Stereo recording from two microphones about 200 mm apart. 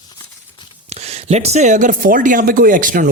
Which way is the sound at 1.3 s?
35° right (ahead or behind).